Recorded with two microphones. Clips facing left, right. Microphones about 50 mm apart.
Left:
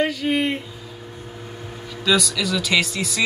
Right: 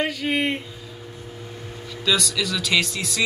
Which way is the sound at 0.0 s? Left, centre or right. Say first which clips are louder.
Left 2 dB; centre.